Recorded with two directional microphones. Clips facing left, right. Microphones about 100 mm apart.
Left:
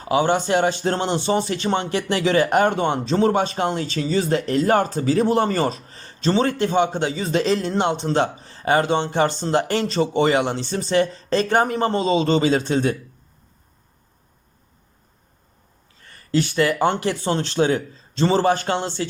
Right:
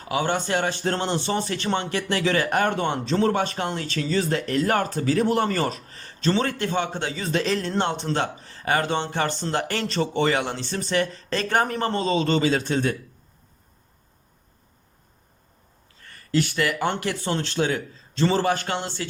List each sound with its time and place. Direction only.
0.0 s a man's voice: 25° left (ahead or behind)
16.1 s a man's voice: 25° left (ahead or behind)